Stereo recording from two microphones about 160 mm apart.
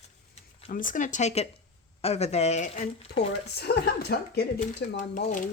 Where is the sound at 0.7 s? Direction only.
55° left (ahead or behind).